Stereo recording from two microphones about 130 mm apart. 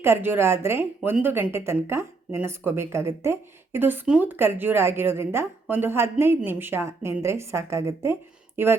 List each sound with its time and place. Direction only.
0.0 s speech: 15° right (ahead or behind)